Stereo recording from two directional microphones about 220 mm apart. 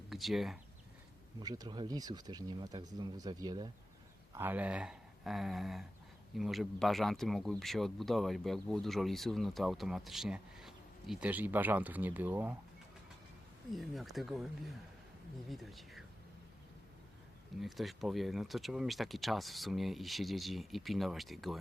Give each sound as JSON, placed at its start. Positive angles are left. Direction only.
{"t": 0.1, "sound": "speech", "side_deg": 0}
{"t": 1.4, "sound": "speech", "side_deg": -20}
{"t": 13.7, "sound": "speech", "side_deg": 0}
{"t": 17.6, "sound": "speech", "side_deg": 0}